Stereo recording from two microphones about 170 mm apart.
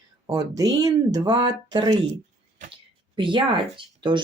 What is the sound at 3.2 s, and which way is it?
Speech, 30° right (ahead or behind).